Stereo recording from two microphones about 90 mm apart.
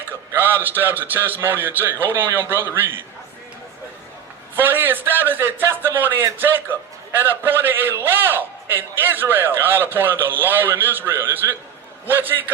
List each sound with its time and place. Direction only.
0.3 s a sound: 20° right (ahead or behind)
0.8 s a man's voice: 20° right (ahead or behind)
4.5 s a man's voice: 25° right (ahead or behind)